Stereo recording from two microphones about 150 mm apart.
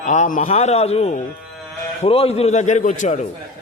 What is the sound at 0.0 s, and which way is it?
A man's voice, 55° left (ahead or behind).